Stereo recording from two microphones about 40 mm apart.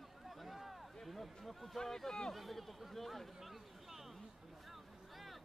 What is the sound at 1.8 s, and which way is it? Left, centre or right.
Speech, centre.